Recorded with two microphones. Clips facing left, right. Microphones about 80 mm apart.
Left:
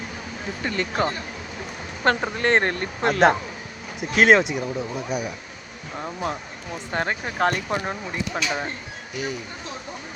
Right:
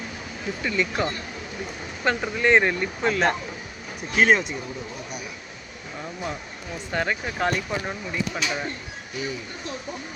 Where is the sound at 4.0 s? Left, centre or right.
Left.